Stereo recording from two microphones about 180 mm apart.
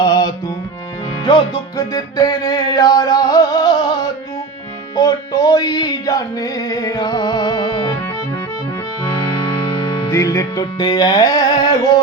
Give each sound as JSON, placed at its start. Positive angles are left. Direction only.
{"t": 0.0, "sound": "music", "side_deg": 20}
{"t": 9.4, "sound": "speech", "side_deg": 25}